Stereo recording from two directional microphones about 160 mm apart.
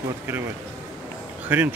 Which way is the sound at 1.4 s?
10° right (ahead or behind).